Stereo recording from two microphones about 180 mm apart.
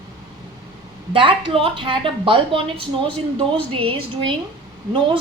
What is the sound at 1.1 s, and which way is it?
A woman's voice, 30° right (ahead or behind).